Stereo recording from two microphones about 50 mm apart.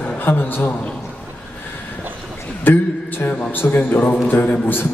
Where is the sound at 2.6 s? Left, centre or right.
Left.